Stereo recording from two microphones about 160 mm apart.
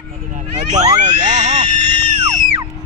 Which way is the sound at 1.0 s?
45° right (ahead or behind).